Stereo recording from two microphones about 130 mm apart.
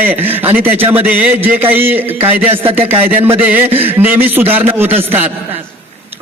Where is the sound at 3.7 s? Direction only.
50° right (ahead or behind).